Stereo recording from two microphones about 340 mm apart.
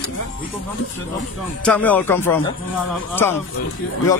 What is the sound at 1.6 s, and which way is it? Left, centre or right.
Speech, centre.